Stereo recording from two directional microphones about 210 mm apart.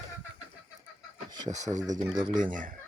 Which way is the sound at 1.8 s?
15° right (ahead or behind).